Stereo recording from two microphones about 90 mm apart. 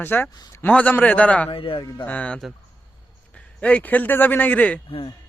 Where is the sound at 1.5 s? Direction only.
75° left (ahead or behind).